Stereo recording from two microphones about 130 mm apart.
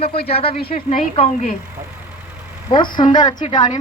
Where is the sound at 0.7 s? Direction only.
90° left.